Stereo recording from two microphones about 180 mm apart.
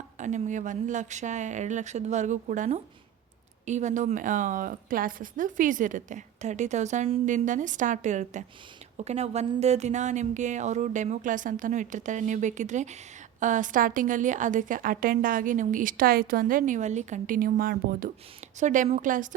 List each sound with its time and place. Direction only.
0.2 s a woman's voice: 40° right (ahead or behind)